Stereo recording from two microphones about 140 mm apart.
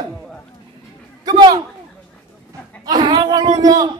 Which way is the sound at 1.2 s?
30° right (ahead or behind).